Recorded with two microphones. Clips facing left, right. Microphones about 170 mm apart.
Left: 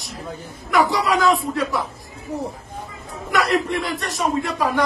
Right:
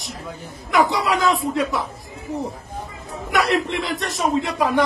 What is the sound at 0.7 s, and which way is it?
A man's voice, 20° right (ahead or behind).